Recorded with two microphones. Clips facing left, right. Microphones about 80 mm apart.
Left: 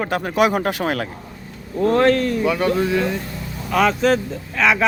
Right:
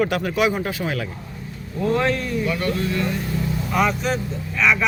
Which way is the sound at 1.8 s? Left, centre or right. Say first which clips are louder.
Left 5 dB; left.